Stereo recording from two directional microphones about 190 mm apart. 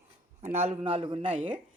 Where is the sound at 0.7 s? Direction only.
30° right (ahead or behind).